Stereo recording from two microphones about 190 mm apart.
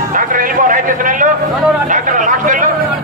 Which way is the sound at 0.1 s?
45° right (ahead or behind).